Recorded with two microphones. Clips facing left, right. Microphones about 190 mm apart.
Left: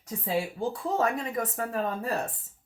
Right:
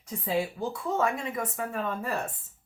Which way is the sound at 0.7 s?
35° left (ahead or behind).